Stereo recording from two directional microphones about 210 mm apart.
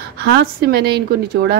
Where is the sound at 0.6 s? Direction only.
45° right (ahead or behind).